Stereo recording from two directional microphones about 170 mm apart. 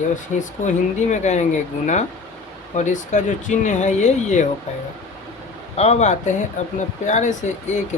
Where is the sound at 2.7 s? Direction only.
45° left (ahead or behind).